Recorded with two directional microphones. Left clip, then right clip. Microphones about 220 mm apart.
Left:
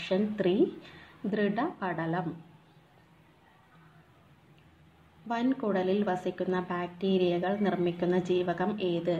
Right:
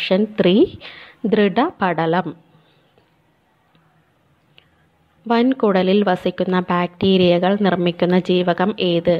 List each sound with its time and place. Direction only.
0.0 s a woman's voice: 40° right (ahead or behind)
5.3 s a woman's voice: 35° right (ahead or behind)